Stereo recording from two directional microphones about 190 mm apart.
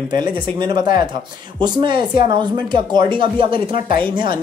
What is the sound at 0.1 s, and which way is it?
Speech, 20° right (ahead or behind).